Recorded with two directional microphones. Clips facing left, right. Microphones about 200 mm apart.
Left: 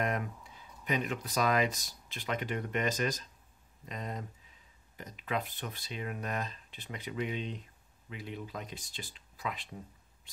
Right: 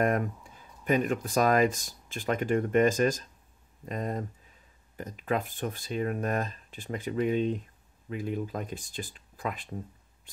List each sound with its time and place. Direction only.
0.0 s speech: 50° right (ahead or behind)